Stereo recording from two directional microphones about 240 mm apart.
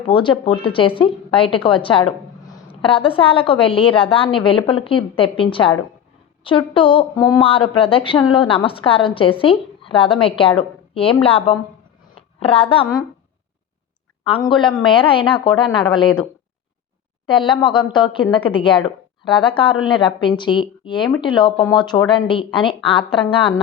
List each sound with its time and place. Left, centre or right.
0.0 s a woman's voice: left
14.3 s a woman's voice: left
17.2 s a woman's voice: centre